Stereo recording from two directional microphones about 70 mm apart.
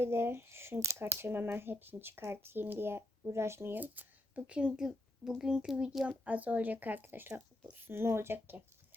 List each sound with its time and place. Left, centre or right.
0.0 s speech: right
3.8 s speech: right; by 6.1 s centre
6.1 s speech: right